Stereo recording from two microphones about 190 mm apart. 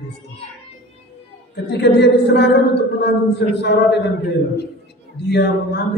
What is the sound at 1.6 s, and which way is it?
Speech, 60° left (ahead or behind).